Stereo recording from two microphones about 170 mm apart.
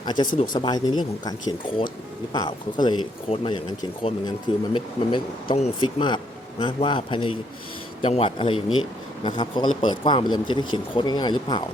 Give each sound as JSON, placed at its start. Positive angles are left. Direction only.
{"t": 0.0, "sound": "a man's voice", "side_deg": 25}